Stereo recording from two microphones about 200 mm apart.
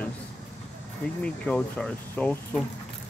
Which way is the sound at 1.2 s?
5° left (ahead or behind).